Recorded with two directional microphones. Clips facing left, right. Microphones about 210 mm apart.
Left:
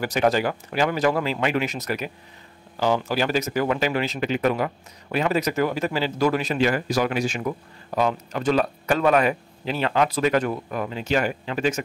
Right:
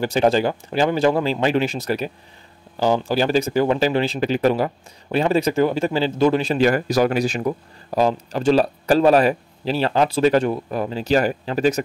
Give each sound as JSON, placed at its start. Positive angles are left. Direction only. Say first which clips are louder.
{"t": 0.0, "sound": "speech", "louder": "right 4 dB", "side_deg": -30}
{"t": 6.6, "sound": "speech", "louder": "right 5 dB", "side_deg": -40}